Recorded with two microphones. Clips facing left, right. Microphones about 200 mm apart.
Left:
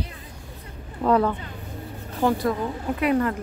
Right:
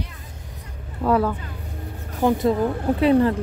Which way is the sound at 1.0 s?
5° right (ahead or behind).